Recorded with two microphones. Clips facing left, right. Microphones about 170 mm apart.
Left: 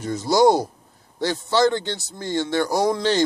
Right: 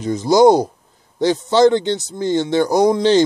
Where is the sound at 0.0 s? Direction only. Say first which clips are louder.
Right 5 dB; 20° right (ahead or behind).